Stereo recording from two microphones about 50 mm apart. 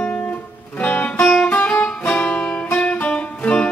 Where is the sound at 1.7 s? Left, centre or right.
Left.